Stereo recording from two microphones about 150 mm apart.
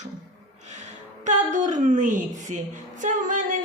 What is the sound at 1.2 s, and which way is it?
A woman's voice, 55° right (ahead or behind).